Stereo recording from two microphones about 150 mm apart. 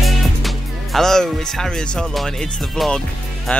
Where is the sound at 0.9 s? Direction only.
5° left (ahead or behind).